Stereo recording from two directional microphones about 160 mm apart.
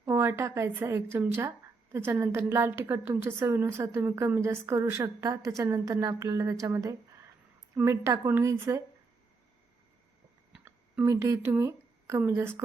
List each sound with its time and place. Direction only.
0.0 s a woman's voice: 15° right (ahead or behind)
11.0 s speech: 20° right (ahead or behind)